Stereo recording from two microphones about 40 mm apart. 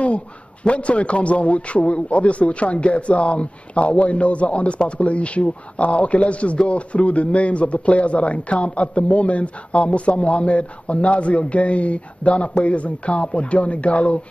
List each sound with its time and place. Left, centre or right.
0.7 s a man's voice: left